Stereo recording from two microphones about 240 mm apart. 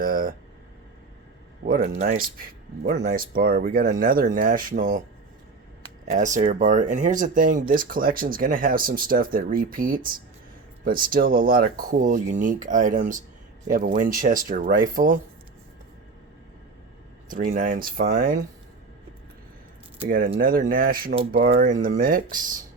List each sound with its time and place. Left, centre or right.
0.0 s speech: right
1.6 s speech: right
6.1 s speech: right
17.2 s speech: right
20.1 s speech: right